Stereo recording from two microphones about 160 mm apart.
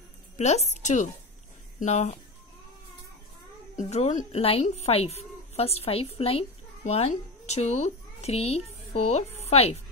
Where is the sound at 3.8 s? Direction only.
45° left (ahead or behind).